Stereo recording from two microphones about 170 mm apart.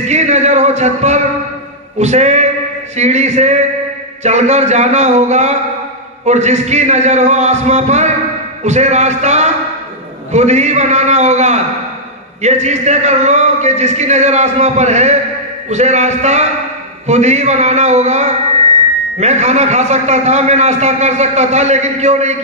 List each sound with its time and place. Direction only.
0.1 s a man's voice: 40° right (ahead or behind)